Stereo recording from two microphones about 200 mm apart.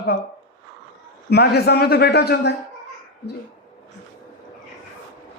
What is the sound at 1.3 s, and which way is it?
A man's voice, 55° left (ahead or behind).